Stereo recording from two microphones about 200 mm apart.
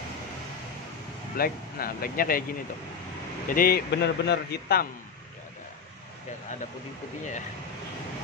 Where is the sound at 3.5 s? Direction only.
45° left (ahead or behind).